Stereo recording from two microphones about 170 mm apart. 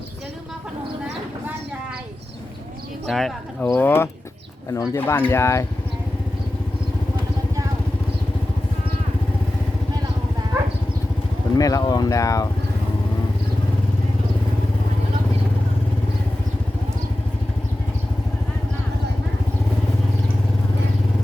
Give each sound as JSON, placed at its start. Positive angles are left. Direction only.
{"t": 3.1, "sound": "speech", "side_deg": 0}
{"t": 3.7, "sound": "speech", "side_deg": 15}
{"t": 11.5, "sound": "speech", "side_deg": 20}